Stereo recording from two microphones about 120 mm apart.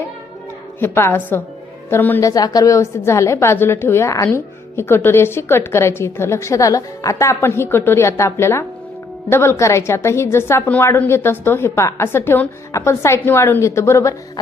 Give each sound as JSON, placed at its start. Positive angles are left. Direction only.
{"t": 0.8, "sound": "a woman's voice", "side_deg": 20}
{"t": 2.2, "sound": "a woman's voice", "side_deg": 30}